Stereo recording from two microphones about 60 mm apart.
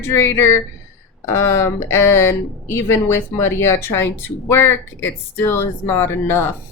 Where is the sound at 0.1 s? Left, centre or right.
Left.